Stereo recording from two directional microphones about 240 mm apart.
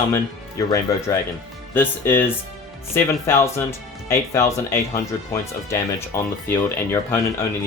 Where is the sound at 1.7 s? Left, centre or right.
Centre.